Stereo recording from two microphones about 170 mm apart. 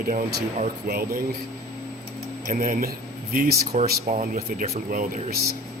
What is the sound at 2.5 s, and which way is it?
Speech, 50° right (ahead or behind).